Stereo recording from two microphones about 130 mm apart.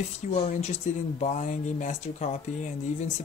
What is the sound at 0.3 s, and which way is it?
Speech, 65° left (ahead or behind).